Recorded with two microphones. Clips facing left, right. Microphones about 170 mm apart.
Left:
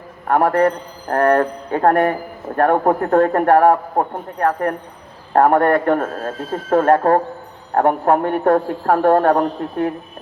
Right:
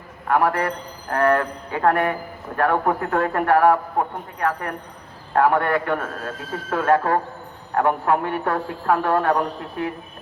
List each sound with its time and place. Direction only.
0.3 s a man's voice: 45° left (ahead or behind)